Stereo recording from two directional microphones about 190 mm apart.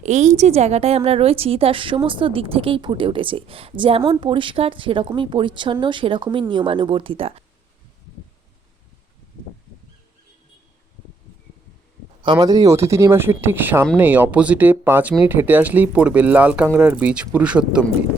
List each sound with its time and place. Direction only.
0.0 s a woman's voice: 40° right (ahead or behind)
12.2 s speech: 20° right (ahead or behind); by 17.8 s 5° right (ahead or behind)